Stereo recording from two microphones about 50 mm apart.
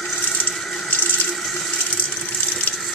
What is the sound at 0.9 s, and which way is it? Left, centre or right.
Water, left.